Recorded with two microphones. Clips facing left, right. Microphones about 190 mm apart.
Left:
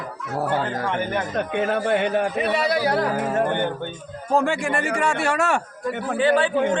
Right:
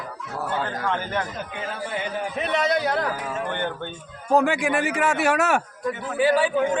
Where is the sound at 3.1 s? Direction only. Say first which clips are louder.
Left 8 dB; 50° left (ahead or behind).